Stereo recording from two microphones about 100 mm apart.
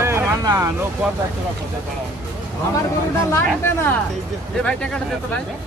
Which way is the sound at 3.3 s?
25° left (ahead or behind).